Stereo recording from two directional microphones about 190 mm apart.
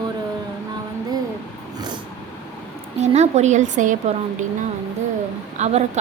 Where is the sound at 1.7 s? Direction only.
20° right (ahead or behind).